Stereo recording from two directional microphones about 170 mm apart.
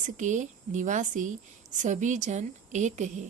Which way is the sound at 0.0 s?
45° right (ahead or behind).